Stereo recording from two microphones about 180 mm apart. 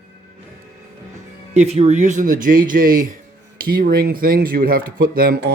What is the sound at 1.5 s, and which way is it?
Speech, 35° right (ahead or behind).